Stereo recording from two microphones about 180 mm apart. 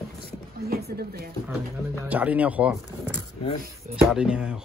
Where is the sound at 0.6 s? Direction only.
55° right (ahead or behind).